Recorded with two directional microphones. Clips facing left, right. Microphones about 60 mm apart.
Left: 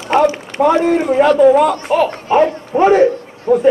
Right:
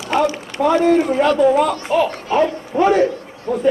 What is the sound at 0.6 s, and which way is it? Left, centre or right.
Speech, left.